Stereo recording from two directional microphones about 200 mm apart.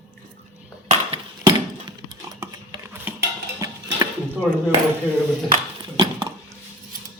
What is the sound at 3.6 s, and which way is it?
Music, 15° right (ahead or behind).